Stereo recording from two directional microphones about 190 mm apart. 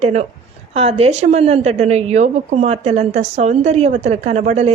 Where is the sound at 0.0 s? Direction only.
35° right (ahead or behind).